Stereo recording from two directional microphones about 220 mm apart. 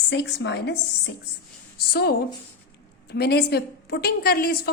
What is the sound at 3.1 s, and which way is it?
A woman's voice, 45° left (ahead or behind).